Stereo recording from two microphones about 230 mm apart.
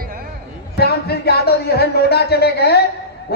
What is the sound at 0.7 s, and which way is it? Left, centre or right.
Speech, left.